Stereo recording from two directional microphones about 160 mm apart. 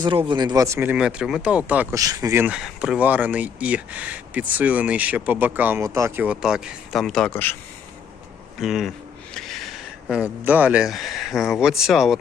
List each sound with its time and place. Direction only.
0.3 s speech: 25° right (ahead or behind); by 1.9 s 10° right (ahead or behind)
1.9 s speech: 20° right (ahead or behind)
2.6 s speech: centre (ahead or behind)
8.5 s speech: centre (ahead or behind)